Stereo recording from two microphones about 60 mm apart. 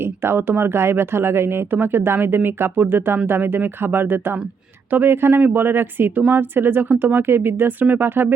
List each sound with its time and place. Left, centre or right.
0.0 s speech: right